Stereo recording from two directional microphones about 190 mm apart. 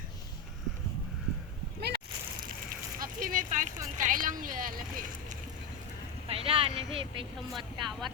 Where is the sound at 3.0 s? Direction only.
45° right (ahead or behind).